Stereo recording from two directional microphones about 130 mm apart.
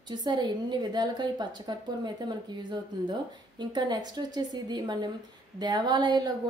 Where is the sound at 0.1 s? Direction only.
35° right (ahead or behind).